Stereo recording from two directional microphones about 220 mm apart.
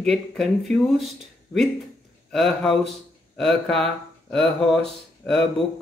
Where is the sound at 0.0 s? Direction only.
Centre (ahead or behind).